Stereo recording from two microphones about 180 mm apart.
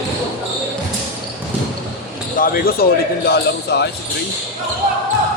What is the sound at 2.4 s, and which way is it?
A man's voice, 55° left (ahead or behind).